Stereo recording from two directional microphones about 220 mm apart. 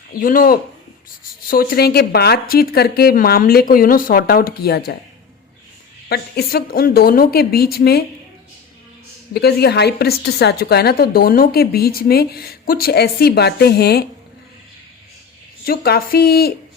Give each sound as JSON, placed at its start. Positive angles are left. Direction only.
{"t": 0.1, "sound": "a woman's voice", "side_deg": 40}
{"t": 6.1, "sound": "a woman's voice", "side_deg": 45}
{"t": 9.3, "sound": "a woman's voice", "side_deg": 45}
{"t": 15.6, "sound": "a woman's voice", "side_deg": 45}